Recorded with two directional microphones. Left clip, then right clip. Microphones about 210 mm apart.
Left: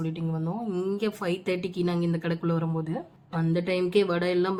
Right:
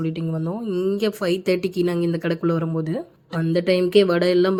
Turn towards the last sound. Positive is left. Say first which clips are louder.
# right 8 dB
turn(degrees=-25)  # may be behind; listen again after turning